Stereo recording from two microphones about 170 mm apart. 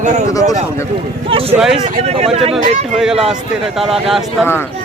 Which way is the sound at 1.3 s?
35° right (ahead or behind).